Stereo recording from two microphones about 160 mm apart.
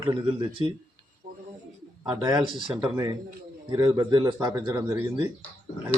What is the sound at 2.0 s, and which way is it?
A man's voice, 25° right (ahead or behind).